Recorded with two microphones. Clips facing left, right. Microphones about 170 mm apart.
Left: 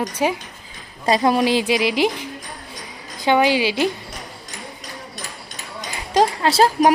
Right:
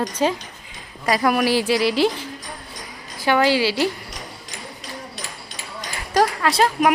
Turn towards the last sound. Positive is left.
turn(degrees=30)  # may be behind; listen again after turning